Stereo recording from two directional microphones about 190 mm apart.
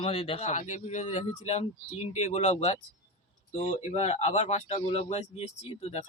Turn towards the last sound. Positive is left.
turn(degrees=35)  # may be behind; listen again after turning